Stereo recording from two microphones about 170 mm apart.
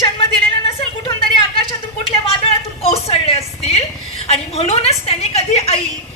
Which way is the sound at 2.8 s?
35° left (ahead or behind).